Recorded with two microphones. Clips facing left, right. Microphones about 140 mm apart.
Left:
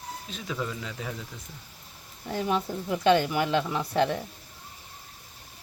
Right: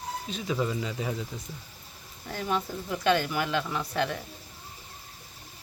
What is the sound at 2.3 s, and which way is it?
Speech, 25° left (ahead or behind).